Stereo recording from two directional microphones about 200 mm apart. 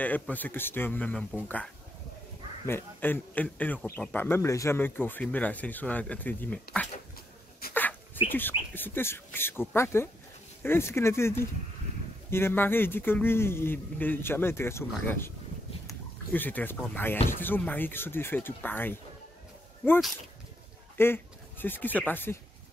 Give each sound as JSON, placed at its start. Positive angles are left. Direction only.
{"t": 0.0, "sound": "a man's voice", "side_deg": 10}
{"t": 7.6, "sound": "a sound", "side_deg": 50}
{"t": 8.3, "sound": "a man's voice", "side_deg": 10}